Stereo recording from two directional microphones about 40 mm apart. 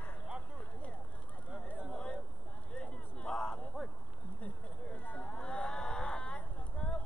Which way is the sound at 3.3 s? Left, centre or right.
Left.